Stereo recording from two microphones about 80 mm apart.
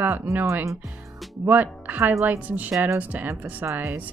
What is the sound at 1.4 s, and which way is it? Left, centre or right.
Speech, right.